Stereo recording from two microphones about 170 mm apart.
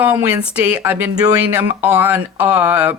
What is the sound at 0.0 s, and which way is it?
A woman's voice, 10° right (ahead or behind).